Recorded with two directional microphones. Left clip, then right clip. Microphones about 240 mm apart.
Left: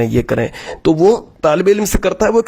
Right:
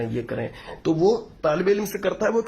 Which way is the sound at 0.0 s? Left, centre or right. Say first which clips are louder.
Left 12 dB; left.